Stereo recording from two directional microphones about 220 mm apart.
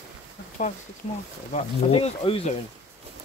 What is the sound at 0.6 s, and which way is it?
Speech, 35° left (ahead or behind).